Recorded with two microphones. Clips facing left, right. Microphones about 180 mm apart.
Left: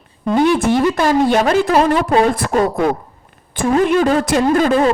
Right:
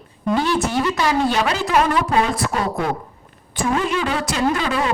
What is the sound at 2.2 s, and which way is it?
Speech, 50° left (ahead or behind).